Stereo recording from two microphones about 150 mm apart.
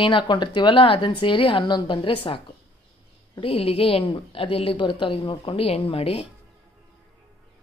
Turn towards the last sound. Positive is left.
turn(degrees=40)  # may be behind; listen again after turning